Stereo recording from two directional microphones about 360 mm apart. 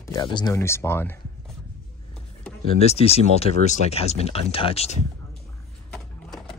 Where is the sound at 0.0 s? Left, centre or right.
Centre.